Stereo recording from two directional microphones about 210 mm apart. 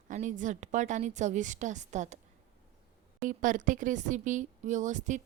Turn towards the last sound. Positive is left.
turn(degrees=-35)  # may be behind; listen again after turning